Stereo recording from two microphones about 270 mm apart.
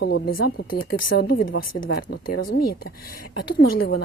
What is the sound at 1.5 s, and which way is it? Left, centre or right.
Speech, left.